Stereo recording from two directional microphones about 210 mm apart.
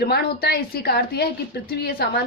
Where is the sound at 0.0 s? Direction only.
50° left (ahead or behind).